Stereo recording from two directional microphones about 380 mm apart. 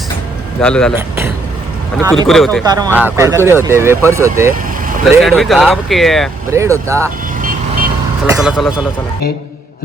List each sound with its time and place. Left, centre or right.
0.6 s speech: centre
2.6 s speech: centre
8.3 s speech: centre